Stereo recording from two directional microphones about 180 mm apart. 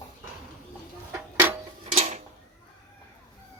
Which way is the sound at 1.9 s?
40° right (ahead or behind).